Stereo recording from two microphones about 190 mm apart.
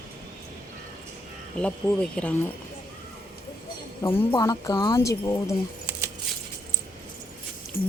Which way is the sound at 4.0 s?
15° left (ahead or behind).